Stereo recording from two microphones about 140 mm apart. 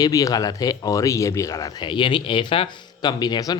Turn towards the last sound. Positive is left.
turn(degrees=30)  # may be behind; listen again after turning